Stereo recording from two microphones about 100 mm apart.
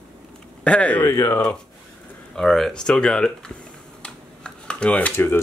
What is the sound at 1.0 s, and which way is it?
Speech, 25° left (ahead or behind).